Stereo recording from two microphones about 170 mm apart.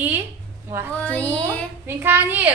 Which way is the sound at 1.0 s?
10° left (ahead or behind).